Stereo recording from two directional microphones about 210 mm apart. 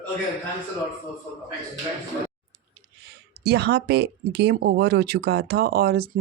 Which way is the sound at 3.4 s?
50° right (ahead or behind).